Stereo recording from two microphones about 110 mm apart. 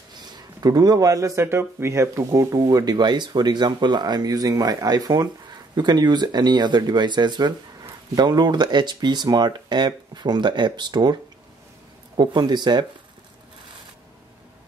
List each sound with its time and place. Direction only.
0.1 s speech: 40° right (ahead or behind)
12.2 s speech: 40° right (ahead or behind)